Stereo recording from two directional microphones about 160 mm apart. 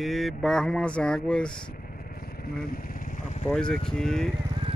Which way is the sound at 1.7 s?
70° left (ahead or behind).